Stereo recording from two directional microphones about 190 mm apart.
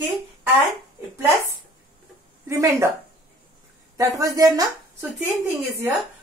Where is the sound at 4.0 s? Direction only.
20° right (ahead or behind).